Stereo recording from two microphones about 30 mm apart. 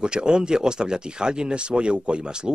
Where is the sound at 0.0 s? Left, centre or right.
Right.